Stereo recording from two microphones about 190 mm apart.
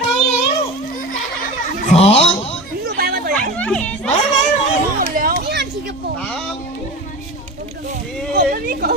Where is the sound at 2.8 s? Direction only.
55° right (ahead or behind).